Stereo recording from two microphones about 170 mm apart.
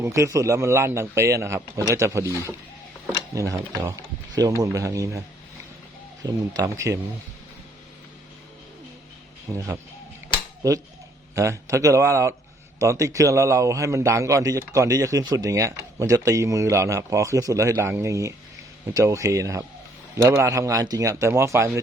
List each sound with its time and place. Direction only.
0.0 s speech: 15° right (ahead or behind)
3.3 s a man's voice: 20° right (ahead or behind)
6.2 s a man's voice: 20° right (ahead or behind)
9.5 s a man's voice: 20° right (ahead or behind)